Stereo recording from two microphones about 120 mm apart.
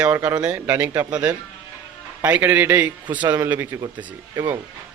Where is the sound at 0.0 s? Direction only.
15° right (ahead or behind).